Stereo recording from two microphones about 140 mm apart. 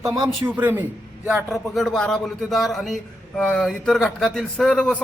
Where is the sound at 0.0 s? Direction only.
20° right (ahead or behind).